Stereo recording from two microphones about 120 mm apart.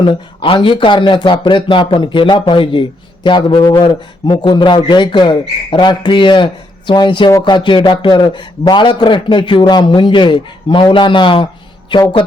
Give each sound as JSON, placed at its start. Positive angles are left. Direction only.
{"t": 0.0, "sound": "a man's voice", "side_deg": 45}